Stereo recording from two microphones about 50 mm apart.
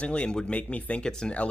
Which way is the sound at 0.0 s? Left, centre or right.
Left.